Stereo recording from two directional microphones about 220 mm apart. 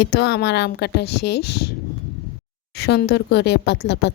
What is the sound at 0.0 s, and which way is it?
Speech, 50° left (ahead or behind).